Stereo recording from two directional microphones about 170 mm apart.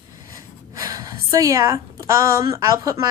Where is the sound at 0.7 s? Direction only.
20° right (ahead or behind).